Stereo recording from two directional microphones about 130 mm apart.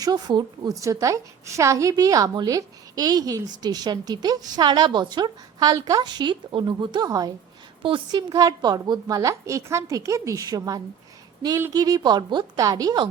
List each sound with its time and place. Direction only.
0.0 s a woman's voice: 30° right (ahead or behind)
7.8 s a woman's voice: 40° right (ahead or behind)
8.3 s a woman's voice: 30° right (ahead or behind)